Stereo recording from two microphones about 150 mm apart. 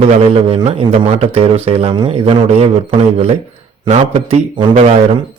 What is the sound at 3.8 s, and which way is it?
Speech, 45° right (ahead or behind).